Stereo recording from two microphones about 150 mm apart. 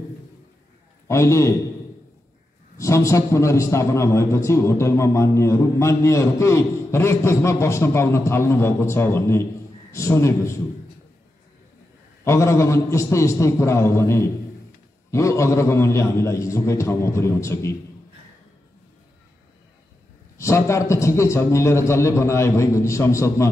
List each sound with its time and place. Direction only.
1.0 s a man's voice: 20° left (ahead or behind)
2.8 s a man's voice: 20° left (ahead or behind)
12.3 s a man's voice: 20° left (ahead or behind)
20.3 s a man's voice: 20° left (ahead or behind)